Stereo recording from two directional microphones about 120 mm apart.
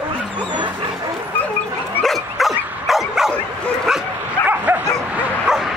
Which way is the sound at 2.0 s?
Centre (ahead or behind).